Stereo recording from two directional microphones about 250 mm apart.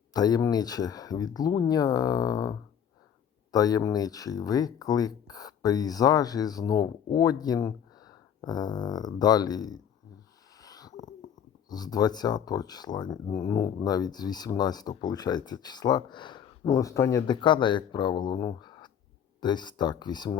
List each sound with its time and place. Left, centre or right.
0.1 s speech: centre
10.6 s a sound: centre
11.7 s speech: centre